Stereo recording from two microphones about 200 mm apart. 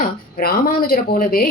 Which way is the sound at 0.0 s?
45° left (ahead or behind).